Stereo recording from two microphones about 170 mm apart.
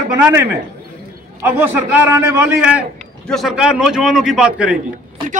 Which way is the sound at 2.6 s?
5° right (ahead or behind).